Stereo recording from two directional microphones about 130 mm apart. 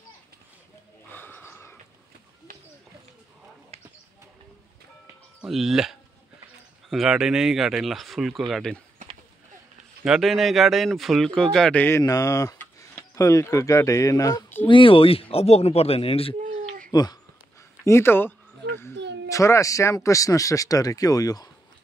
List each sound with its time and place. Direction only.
1.1 s snort: 15° left (ahead or behind)
3.7 s basketball bounce: 50° right (ahead or behind)
5.4 s speech: centre (ahead or behind)
10.0 s speech: centre (ahead or behind)
12.0 s speech: 25° left (ahead or behind)
14.7 s speech: 40° left (ahead or behind)
16.4 s a sound: 90° right
16.9 s speech: 30° left (ahead or behind)
17.8 s speech: 20° left (ahead or behind)